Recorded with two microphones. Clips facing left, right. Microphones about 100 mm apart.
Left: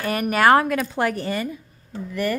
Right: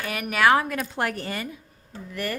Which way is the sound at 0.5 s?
90° left.